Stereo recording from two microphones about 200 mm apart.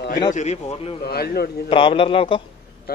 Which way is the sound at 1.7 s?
25° left (ahead or behind).